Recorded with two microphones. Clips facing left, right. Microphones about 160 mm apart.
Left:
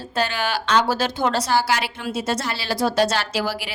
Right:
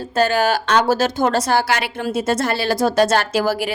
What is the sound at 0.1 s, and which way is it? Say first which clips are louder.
A woman's voice: right 7 dB; 45° right (ahead or behind).